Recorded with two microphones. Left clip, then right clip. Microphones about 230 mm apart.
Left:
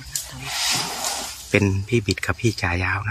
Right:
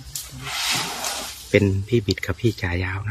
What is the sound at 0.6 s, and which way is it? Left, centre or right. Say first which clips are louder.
Speech: left 1 dB; right.